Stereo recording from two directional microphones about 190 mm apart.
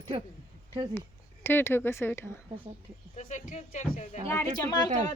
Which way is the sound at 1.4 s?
10° left (ahead or behind).